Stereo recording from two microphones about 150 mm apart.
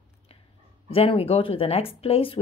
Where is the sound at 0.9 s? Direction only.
40° left (ahead or behind).